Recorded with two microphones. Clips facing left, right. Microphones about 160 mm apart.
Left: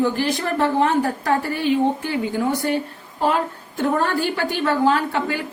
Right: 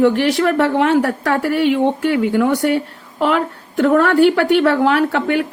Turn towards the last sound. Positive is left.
turn(degrees=-70)  # may be behind; listen again after turning